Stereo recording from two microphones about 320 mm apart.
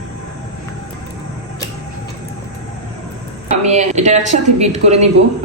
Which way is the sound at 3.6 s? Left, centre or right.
Right.